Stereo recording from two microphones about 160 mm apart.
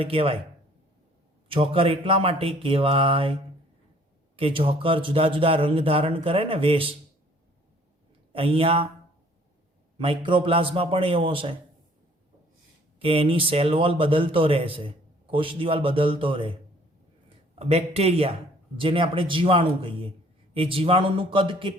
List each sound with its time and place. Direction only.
0.0 s a man's voice: 35° right (ahead or behind)
1.5 s a man's voice: 35° right (ahead or behind)
4.4 s a man's voice: 35° right (ahead or behind)
8.3 s a man's voice: 35° right (ahead or behind)
10.0 s a man's voice: 30° right (ahead or behind)
13.0 s a man's voice: 35° right (ahead or behind)